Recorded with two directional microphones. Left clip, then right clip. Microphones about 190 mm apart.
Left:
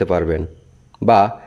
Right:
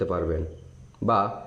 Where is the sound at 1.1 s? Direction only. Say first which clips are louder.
Left 10 dB; 60° left (ahead or behind).